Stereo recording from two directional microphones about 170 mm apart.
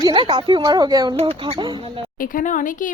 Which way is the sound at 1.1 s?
35° right (ahead or behind).